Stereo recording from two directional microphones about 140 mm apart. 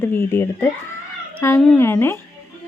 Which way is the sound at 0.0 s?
15° left (ahead or behind).